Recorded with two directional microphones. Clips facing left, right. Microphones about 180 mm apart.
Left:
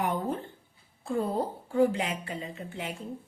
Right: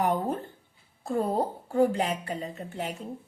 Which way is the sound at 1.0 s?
40° right (ahead or behind).